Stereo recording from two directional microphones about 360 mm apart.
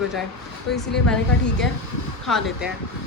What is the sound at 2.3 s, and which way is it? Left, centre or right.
Speech, centre.